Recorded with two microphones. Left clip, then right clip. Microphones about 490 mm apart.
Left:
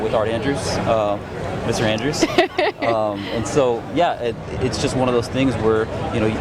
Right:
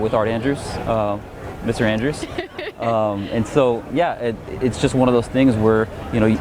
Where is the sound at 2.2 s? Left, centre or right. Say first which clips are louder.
Left 11 dB; left.